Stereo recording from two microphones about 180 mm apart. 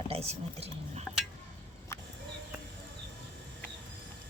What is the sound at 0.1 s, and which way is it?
Speech, 35° right (ahead or behind).